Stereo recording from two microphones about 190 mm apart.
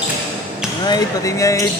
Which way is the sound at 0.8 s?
20° left (ahead or behind).